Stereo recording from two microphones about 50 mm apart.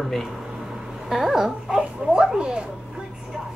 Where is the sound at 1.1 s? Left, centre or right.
Centre.